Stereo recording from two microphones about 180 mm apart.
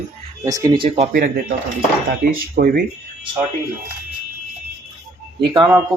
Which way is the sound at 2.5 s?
55° right (ahead or behind).